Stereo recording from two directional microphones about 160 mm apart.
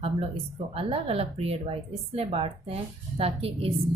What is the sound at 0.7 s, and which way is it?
A woman's voice, 35° right (ahead or behind).